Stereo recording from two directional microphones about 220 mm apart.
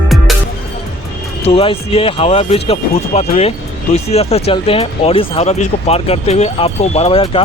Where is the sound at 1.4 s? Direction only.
25° left (ahead or behind).